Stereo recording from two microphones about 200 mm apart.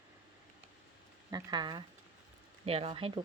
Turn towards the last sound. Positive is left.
turn(degrees=-25)  # may be behind; listen again after turning